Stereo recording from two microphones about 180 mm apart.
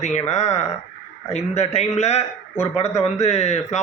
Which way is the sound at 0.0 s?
40° left (ahead or behind).